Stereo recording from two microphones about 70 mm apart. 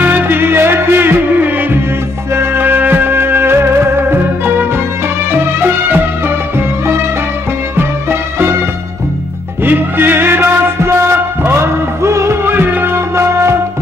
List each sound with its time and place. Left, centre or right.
0.0 s music: right
7.7 s music: right
9.7 s music: right
12.4 s music: right